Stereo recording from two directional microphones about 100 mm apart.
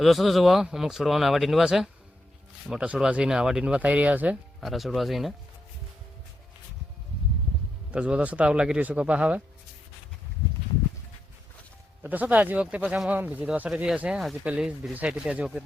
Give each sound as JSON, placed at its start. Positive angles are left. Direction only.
{"t": 0.0, "sound": "speech", "side_deg": 0}
{"t": 4.6, "sound": "speech", "side_deg": 0}
{"t": 7.9, "sound": "speech", "side_deg": -10}
{"t": 12.0, "sound": "speech", "side_deg": -15}